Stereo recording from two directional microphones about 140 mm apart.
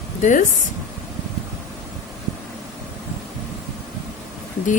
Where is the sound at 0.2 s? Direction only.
65° left (ahead or behind).